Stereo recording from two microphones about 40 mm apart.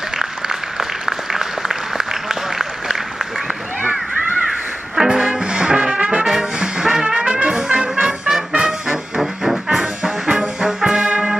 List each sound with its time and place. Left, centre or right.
0.1 s applause: centre
4.9 s music: centre
6.6 s brass instrument: centre
7.4 s music: centre
8.3 s trumpet: centre
8.9 s brass instrument: centre
11.1 s music: right